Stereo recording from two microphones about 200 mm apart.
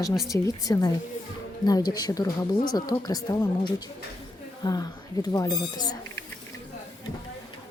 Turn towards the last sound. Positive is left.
turn(degrees=20)  # may be behind; listen again after turning